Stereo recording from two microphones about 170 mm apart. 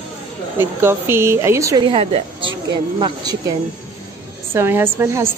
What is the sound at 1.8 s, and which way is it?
A woman's voice, 35° right (ahead or behind).